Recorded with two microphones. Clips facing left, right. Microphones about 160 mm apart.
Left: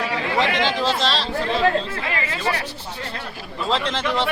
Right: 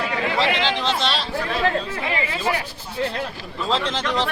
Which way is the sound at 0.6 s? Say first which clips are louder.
Left 1 dB; 5° left (ahead or behind).